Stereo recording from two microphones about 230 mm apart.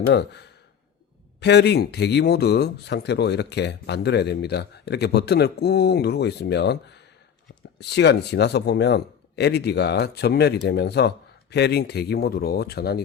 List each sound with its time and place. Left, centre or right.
0.0 s speech: left